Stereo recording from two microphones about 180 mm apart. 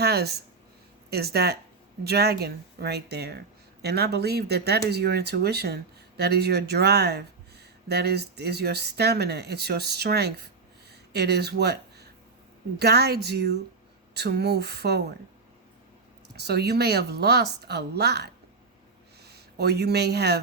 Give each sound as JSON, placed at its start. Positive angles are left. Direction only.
{"t": 0.0, "sound": "a sound", "side_deg": -65}
{"t": 1.1, "sound": "speech", "side_deg": -60}
{"t": 16.3, "sound": "speech", "side_deg": -65}